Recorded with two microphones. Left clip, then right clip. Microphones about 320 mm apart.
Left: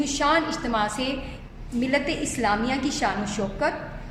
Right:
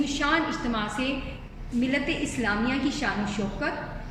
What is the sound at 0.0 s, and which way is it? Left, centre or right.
A woman's voice, centre.